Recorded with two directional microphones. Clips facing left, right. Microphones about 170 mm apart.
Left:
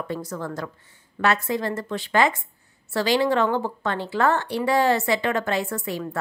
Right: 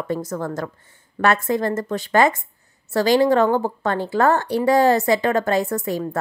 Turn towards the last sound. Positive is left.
turn(degrees=-40)  # may be behind; listen again after turning